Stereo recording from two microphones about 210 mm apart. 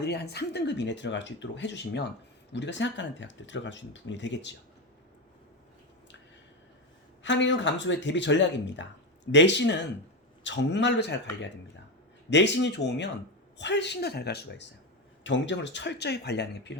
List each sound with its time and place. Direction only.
0.0 s speech: 55° left (ahead or behind)
7.2 s speech: 60° left (ahead or behind)